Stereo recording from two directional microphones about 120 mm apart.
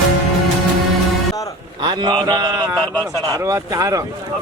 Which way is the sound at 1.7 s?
40° right (ahead or behind).